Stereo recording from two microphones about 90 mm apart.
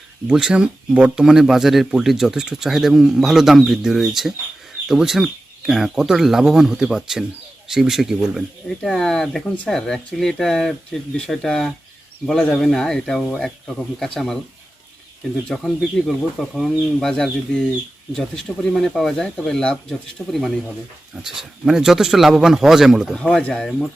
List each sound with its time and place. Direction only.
0.3 s speech: 10° right (ahead or behind)
8.9 s speech: 5° left (ahead or behind)
15.4 s speech: 5° left (ahead or behind)
21.2 s speech: 5° right (ahead or behind)
23.1 s speech: 10° left (ahead or behind)